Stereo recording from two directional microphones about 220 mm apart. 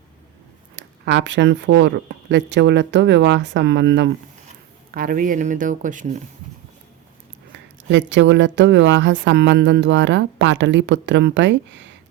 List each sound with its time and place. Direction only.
0.8 s speech: 55° right (ahead or behind)
4.9 s speech: 40° right (ahead or behind)
7.9 s speech: 55° right (ahead or behind)